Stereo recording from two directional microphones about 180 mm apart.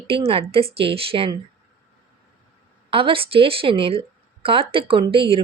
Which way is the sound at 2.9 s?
30° right (ahead or behind).